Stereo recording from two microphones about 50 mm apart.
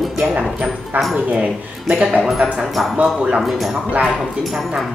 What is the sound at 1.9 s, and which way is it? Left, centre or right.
Speech, right.